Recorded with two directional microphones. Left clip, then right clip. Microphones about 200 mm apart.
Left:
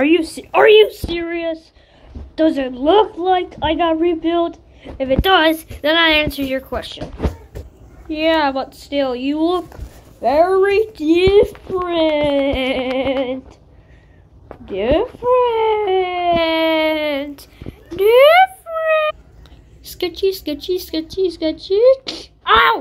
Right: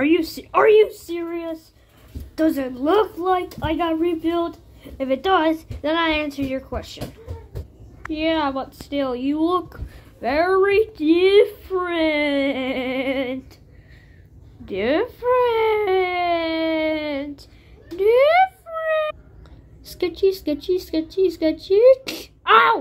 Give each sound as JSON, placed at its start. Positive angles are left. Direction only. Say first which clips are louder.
{"t": 0.0, "sound": "a woman's voice", "louder": "left 4 dB", "side_deg": -10}
{"t": 8.1, "sound": "a woman's voice", "louder": "left 6 dB", "side_deg": -10}
{"t": 14.7, "sound": "a woman's voice", "louder": "left 4 dB", "side_deg": -20}
{"t": 17.9, "sound": "a sound", "louder": "left 6 dB", "side_deg": -10}
{"t": 19.8, "sound": "a woman's voice", "louder": "left 1 dB", "side_deg": -5}